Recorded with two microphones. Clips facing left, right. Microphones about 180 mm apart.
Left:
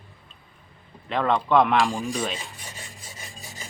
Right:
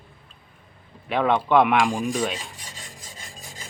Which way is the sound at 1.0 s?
5° right (ahead or behind).